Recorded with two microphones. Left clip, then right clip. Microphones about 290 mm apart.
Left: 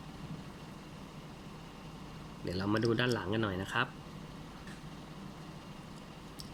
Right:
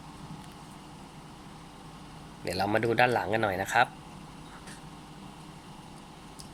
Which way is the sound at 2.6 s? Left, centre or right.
Right.